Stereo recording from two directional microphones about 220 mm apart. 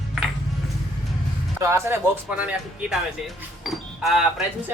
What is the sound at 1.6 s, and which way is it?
Speech, 10° right (ahead or behind).